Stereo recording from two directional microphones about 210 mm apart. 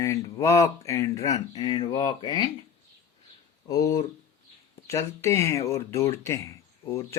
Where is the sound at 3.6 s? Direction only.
15° left (ahead or behind).